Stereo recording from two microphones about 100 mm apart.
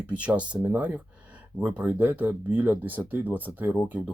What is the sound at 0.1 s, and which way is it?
Speech, 10° right (ahead or behind).